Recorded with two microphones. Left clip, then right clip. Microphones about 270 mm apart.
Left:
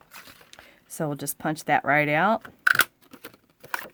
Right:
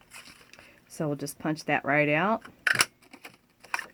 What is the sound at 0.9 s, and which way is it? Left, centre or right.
Speech, left.